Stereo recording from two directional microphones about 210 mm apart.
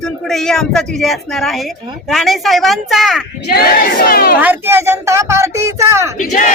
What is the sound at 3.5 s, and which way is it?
Speech, 45° left (ahead or behind).